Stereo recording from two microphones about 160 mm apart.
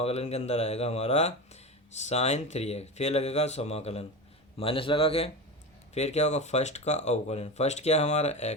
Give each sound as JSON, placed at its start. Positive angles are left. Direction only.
{"t": 0.0, "sound": "speech", "side_deg": 40}